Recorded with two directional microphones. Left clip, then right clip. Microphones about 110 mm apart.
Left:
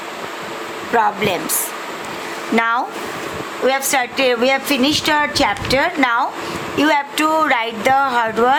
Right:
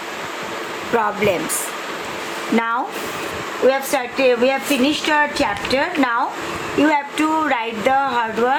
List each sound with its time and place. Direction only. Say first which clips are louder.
0.9 s speech: left 2 dB; 45° left (ahead or behind)
2.6 s speech: left 4 dB; 55° left (ahead or behind)